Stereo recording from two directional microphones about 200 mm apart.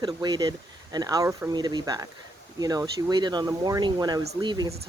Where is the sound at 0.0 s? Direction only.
20° right (ahead or behind).